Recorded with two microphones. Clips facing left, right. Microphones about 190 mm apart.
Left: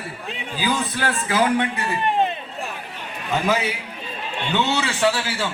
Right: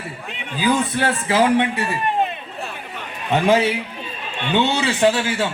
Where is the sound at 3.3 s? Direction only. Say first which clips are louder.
Right 5 dB; 30° right (ahead or behind).